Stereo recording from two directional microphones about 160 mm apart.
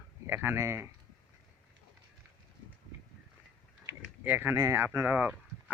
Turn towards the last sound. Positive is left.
turn(degrees=-10)  # may be behind; listen again after turning